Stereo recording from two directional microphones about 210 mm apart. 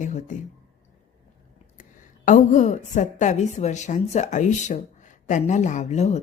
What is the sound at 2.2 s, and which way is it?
A woman's voice, 35° left (ahead or behind).